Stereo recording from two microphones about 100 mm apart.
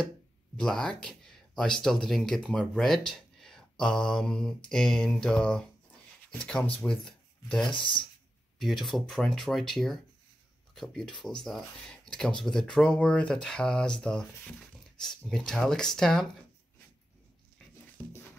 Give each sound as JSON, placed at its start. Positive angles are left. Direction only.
{"t": 0.6, "sound": "speech", "side_deg": 5}
{"t": 3.1, "sound": "mantra", "side_deg": 5}
{"t": 6.3, "sound": "speech", "side_deg": 10}
{"t": 7.7, "sound": "speech", "side_deg": 55}
{"t": 8.5, "sound": "speech", "side_deg": 0}